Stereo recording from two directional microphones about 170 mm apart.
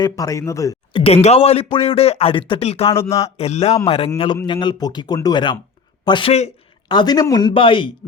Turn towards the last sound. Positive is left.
turn(degrees=30)  # may be behind; listen again after turning